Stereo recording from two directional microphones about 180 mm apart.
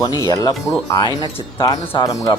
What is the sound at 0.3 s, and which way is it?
Speech, 20° left (ahead or behind).